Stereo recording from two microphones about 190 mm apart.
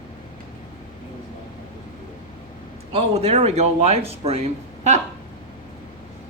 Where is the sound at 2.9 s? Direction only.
35° right (ahead or behind).